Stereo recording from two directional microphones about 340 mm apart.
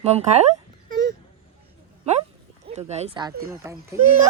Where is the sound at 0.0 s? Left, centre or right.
Centre.